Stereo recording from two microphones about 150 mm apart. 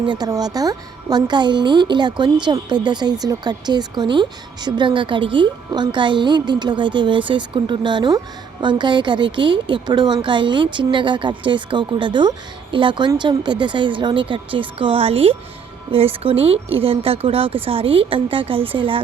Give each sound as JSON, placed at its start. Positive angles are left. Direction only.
{"t": 0.0, "sound": "speech", "side_deg": -30}